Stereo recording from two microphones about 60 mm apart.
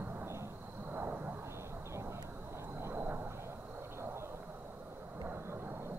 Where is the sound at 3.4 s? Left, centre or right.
Right.